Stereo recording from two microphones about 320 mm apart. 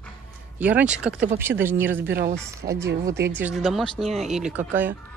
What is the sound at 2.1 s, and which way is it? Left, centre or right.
Speech, right.